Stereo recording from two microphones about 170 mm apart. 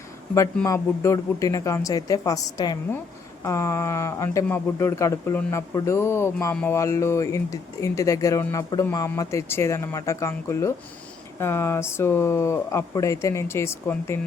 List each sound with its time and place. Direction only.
0.6 s speech: 20° left (ahead or behind)